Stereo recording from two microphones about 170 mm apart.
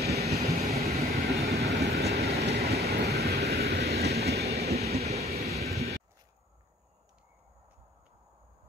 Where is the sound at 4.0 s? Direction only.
70° right (ahead or behind).